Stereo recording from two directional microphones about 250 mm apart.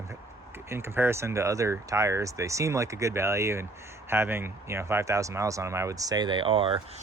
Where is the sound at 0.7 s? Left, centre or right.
Centre.